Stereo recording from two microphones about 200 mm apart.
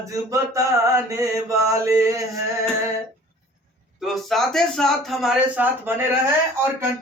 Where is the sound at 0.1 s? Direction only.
15° right (ahead or behind).